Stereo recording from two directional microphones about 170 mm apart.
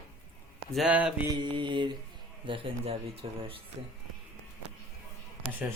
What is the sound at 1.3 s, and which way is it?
Mantra, 30° right (ahead or behind).